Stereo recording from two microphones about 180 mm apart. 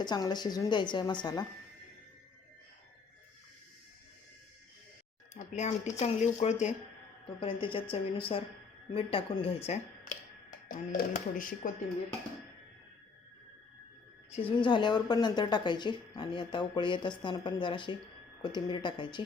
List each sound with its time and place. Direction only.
0.0 s speech: 25° left (ahead or behind)
5.3 s speech: 40° left (ahead or behind)
10.7 s speech: 50° left (ahead or behind)
14.3 s speech: 25° left (ahead or behind)